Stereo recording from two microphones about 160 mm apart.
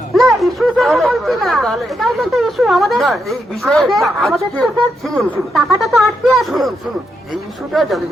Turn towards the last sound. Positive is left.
turn(degrees=0)  # may be behind; listen again after turning